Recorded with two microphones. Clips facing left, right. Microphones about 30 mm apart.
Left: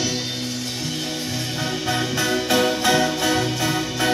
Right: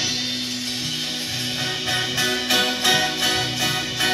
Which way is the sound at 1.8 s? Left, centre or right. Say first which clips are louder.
Left 1 dB; right.